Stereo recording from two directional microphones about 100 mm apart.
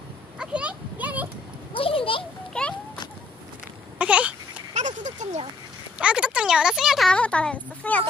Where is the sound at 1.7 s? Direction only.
65° left (ahead or behind).